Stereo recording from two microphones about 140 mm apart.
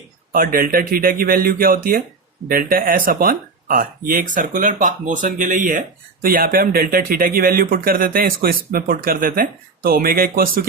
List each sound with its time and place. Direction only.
0.3 s speech: 85° right
6.2 s speech: 90° right